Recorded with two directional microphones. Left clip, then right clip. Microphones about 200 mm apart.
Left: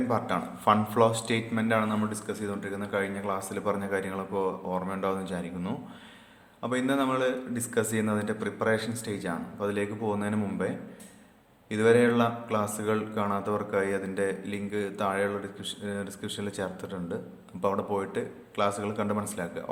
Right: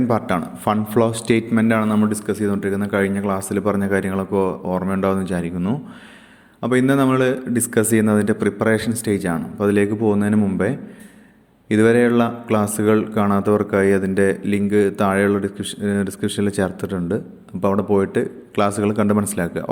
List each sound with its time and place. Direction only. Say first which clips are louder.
0.1 s a man's voice: right 8 dB; 35° right (ahead or behind)